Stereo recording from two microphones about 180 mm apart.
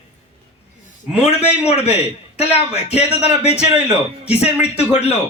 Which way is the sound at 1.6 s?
35° left (ahead or behind).